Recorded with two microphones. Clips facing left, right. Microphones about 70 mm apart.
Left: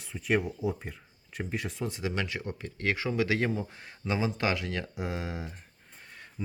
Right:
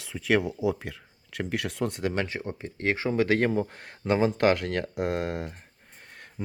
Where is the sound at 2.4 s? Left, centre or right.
Right.